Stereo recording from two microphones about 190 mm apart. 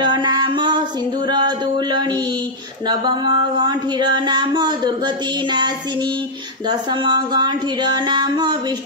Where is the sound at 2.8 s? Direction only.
20° right (ahead or behind).